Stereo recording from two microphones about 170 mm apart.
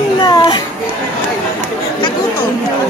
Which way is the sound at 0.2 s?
25° left (ahead or behind).